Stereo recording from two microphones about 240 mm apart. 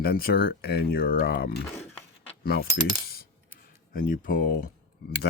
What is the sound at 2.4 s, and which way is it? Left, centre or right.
Coin, left.